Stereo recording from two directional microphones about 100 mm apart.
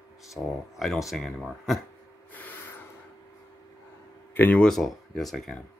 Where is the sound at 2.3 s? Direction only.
20° left (ahead or behind).